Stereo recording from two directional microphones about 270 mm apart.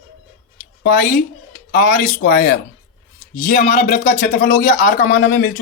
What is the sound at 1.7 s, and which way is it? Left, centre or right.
A man's voice, left.